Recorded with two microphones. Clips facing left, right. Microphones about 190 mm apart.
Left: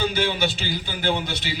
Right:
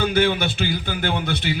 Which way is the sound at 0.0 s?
55° right (ahead or behind).